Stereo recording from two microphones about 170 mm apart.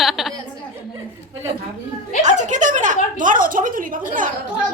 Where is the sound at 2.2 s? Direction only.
45° right (ahead or behind).